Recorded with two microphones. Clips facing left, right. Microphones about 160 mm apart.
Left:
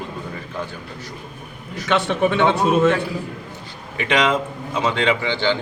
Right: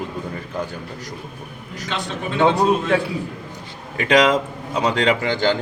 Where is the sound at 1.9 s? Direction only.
75° left (ahead or behind).